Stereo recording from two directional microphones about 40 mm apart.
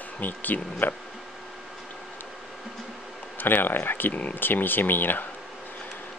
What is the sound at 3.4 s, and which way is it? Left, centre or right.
Speech, left.